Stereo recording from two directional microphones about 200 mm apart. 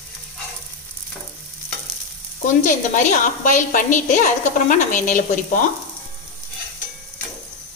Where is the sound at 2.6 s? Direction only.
40° left (ahead or behind).